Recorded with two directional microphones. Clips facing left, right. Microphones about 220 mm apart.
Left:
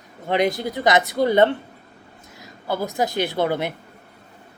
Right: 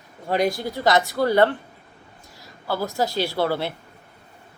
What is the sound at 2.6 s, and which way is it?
Speech, 20° left (ahead or behind).